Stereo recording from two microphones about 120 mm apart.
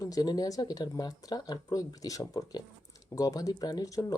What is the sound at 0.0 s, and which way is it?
Speech, 30° left (ahead or behind).